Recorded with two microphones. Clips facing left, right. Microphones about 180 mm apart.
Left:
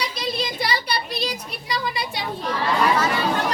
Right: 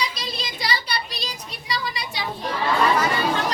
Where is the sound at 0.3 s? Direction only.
55° left (ahead or behind).